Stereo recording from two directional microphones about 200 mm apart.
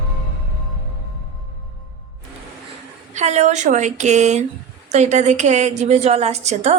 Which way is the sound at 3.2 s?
35° right (ahead or behind).